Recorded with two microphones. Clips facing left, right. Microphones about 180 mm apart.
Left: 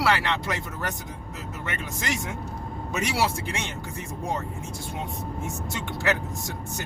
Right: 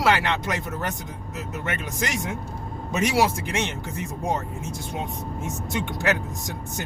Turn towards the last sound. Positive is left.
turn(degrees=-20)  # may be behind; listen again after turning